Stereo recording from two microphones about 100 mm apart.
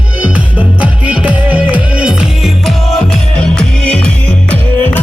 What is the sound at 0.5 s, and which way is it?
Music, 15° right (ahead or behind).